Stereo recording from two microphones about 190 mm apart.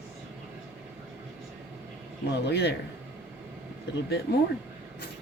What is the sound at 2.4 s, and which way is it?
Speech, 60° left (ahead or behind).